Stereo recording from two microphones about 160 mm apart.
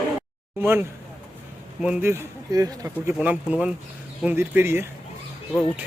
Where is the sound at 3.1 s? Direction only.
10° right (ahead or behind).